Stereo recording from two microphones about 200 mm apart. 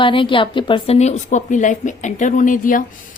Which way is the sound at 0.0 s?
25° left (ahead or behind).